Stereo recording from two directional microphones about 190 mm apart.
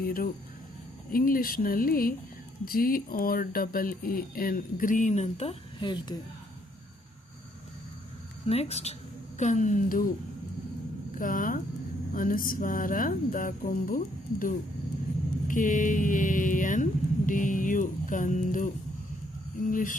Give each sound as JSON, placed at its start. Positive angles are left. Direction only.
{"t": 0.0, "sound": "speech", "side_deg": 50}
{"t": 8.4, "sound": "a sound", "side_deg": 35}
{"t": 11.2, "sound": "speech", "side_deg": 45}